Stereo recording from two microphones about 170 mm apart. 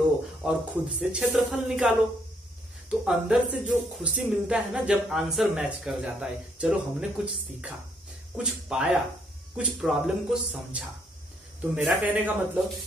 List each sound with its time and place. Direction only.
0.4 s speech: 5° right (ahead or behind)
2.9 s a man's voice: 5° right (ahead or behind)